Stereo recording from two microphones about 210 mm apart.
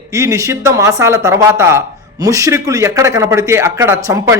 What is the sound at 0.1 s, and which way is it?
Speech, 15° right (ahead or behind).